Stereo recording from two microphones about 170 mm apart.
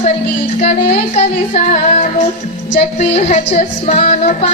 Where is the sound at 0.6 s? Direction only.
40° left (ahead or behind).